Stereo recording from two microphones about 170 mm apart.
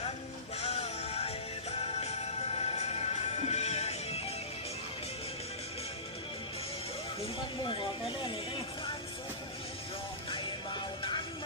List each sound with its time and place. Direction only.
0.6 s music: 40° left (ahead or behind)
7.6 s speech: 30° left (ahead or behind)
10.2 s music: 30° left (ahead or behind)